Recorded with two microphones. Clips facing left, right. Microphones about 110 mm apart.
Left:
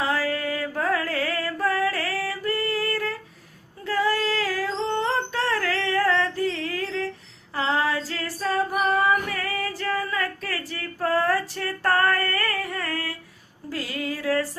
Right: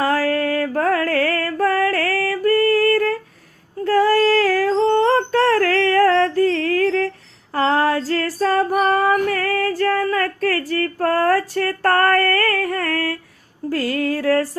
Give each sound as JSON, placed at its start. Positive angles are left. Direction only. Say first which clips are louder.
{"t": 0.0, "sound": "mantra", "louder": "right 7 dB", "side_deg": -55}
{"t": 3.8, "sound": "music", "louder": "right 9 dB", "side_deg": -45}
{"t": 7.5, "sound": "female singing", "louder": "right 7 dB", "side_deg": -55}
{"t": 13.7, "sound": "a sound", "louder": "right 9 dB", "side_deg": -50}